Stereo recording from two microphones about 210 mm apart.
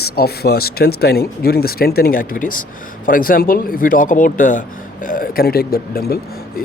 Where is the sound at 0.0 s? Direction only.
50° left (ahead or behind).